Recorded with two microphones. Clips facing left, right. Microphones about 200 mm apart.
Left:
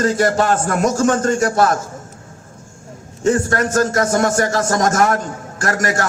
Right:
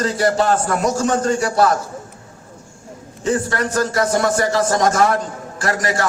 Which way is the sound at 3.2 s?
50° left (ahead or behind).